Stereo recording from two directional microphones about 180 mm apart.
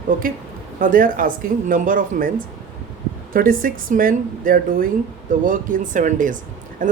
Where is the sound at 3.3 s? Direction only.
50° right (ahead or behind).